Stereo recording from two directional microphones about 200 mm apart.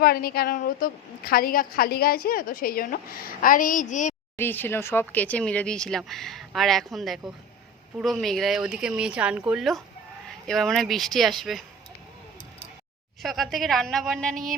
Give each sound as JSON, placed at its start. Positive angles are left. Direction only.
{"t": 0.0, "sound": "a woman's voice", "side_deg": 50}
{"t": 4.4, "sound": "speech", "side_deg": 10}
{"t": 13.2, "sound": "speech", "side_deg": 0}